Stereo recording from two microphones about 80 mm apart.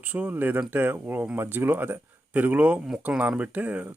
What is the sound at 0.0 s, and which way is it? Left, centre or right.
Speech, right.